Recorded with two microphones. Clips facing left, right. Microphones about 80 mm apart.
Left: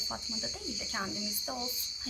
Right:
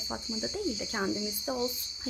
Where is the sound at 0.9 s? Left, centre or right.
Right.